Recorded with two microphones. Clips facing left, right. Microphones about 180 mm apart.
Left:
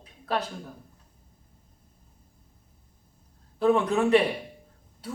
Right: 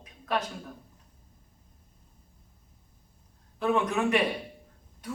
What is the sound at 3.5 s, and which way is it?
Speech, 35° left (ahead or behind).